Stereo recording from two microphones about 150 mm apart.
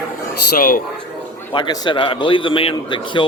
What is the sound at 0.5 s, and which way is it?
Speech, 70° left (ahead or behind).